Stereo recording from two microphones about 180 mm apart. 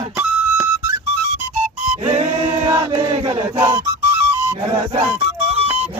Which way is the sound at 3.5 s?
15° right (ahead or behind).